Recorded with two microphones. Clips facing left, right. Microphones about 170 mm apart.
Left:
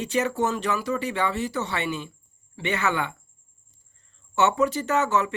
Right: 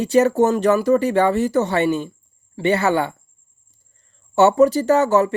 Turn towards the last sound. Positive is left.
turn(degrees=-40)  # may be behind; listen again after turning